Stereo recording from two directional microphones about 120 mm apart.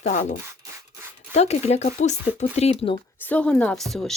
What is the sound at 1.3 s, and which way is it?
Speech, 65° left (ahead or behind).